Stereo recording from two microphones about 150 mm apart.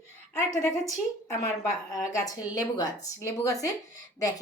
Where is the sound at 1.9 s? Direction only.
25° left (ahead or behind).